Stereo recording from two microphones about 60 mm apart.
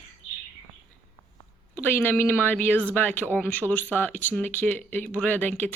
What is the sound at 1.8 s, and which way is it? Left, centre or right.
Speech, left.